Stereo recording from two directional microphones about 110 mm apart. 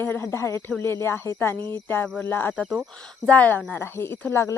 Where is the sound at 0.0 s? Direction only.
20° left (ahead or behind).